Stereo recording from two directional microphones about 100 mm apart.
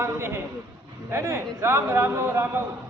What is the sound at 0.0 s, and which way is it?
A man's voice, 25° right (ahead or behind).